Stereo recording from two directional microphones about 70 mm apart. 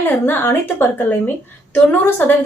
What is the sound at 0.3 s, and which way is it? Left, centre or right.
A woman's voice, left.